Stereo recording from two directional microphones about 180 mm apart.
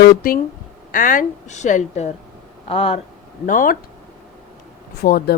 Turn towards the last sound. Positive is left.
turn(degrees=60)  # may be behind; listen again after turning